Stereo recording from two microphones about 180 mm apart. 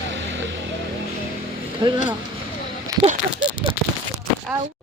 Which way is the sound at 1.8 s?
20° right (ahead or behind).